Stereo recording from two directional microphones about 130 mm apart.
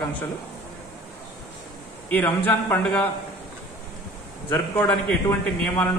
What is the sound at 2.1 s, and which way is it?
Speech, 15° left (ahead or behind).